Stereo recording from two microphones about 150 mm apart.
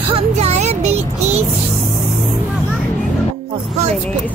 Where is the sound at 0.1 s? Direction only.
45° right (ahead or behind).